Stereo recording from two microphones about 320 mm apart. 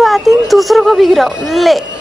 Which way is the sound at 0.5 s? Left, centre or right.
Centre.